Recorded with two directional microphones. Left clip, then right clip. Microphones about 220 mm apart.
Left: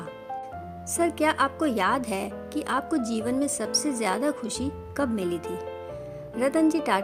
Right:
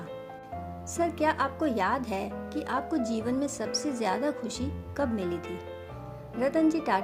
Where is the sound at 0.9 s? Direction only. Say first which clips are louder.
Left 3 dB; 50° left (ahead or behind).